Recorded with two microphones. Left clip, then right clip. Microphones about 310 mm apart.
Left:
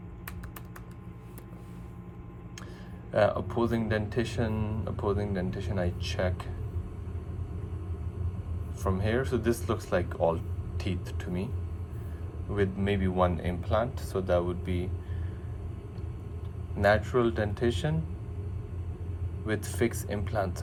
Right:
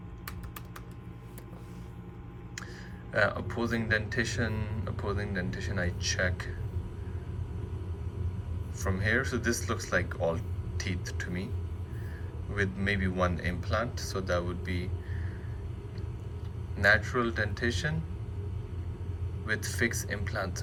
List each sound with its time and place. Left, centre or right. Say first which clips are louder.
3.1 s speech: left 3 dB; centre
8.8 s speech: right 1 dB; centre
12.5 s speech: left 1 dB; centre
16.8 s speech: left 1 dB; centre
19.5 s speech: even; centre